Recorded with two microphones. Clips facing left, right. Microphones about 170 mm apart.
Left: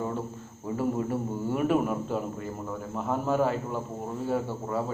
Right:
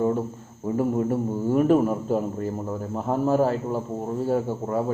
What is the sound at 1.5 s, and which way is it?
A man's voice, 40° right (ahead or behind).